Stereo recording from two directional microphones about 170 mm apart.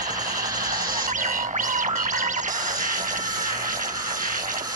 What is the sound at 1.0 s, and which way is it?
Music, 50° right (ahead or behind).